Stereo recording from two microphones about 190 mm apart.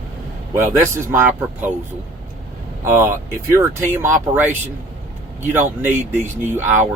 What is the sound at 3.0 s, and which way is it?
Speech, 15° right (ahead or behind).